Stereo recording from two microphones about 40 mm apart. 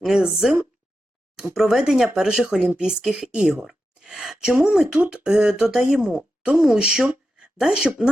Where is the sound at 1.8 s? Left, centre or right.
Centre.